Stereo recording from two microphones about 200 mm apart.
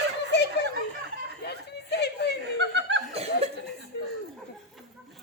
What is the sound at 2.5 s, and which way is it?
Chuckle, 60° right (ahead or behind).